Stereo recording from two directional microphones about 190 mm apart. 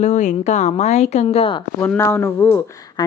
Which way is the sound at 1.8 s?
10° left (ahead or behind).